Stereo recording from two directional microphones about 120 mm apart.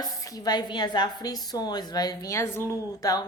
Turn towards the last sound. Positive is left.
turn(degrees=25)  # may be behind; listen again after turning